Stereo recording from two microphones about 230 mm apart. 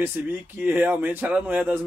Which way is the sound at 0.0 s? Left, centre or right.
Centre.